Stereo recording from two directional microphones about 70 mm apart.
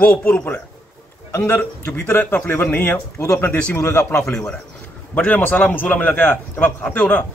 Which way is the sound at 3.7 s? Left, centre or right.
Left.